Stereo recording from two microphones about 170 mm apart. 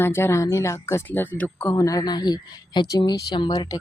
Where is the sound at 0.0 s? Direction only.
15° left (ahead or behind).